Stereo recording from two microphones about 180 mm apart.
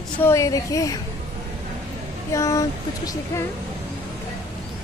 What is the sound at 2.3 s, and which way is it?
Speech, 15° left (ahead or behind).